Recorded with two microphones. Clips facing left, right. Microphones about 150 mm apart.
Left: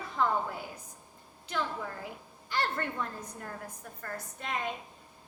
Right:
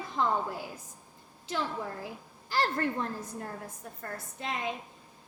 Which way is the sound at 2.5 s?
35° right (ahead or behind).